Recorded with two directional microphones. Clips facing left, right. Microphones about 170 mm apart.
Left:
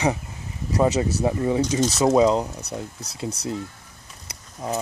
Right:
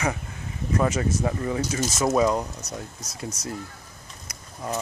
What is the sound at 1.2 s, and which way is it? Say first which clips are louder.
Speech: left 5 dB; 20° left (ahead or behind).